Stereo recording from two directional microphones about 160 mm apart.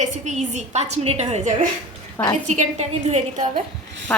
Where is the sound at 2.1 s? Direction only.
20° left (ahead or behind).